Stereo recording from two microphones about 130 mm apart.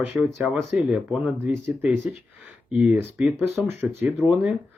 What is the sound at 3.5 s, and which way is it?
Speech, 20° right (ahead or behind).